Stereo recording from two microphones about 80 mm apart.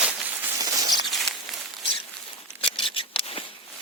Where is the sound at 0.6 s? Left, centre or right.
Right.